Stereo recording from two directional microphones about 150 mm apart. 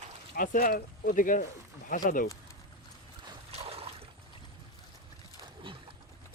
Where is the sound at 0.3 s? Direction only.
65° left (ahead or behind).